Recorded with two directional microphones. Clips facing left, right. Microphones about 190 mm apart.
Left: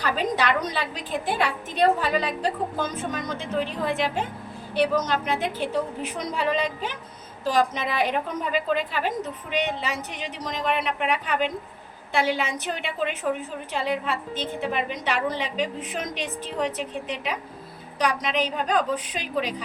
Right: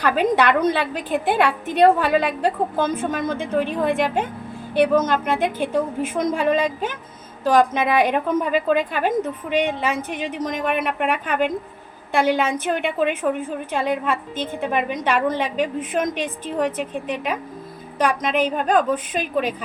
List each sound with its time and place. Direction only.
0.0 s a woman's voice: 55° right (ahead or behind)